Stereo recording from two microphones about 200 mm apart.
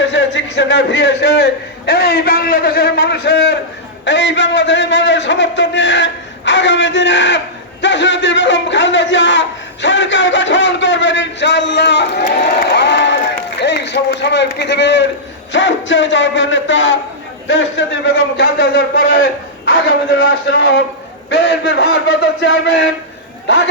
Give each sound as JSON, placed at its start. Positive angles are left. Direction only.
{"t": 0.0, "sound": "a man's voice", "side_deg": 65}
{"t": 18.3, "sound": "a man's voice", "side_deg": 55}
{"t": 20.1, "sound": "a man's voice", "side_deg": 75}